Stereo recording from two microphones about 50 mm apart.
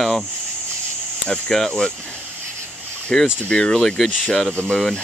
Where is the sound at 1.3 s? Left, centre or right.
Centre.